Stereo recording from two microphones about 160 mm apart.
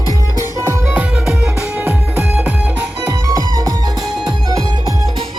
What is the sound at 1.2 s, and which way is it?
Music, 5° right (ahead or behind).